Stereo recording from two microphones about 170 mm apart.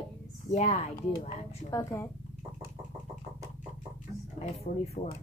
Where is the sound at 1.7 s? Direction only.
20° left (ahead or behind).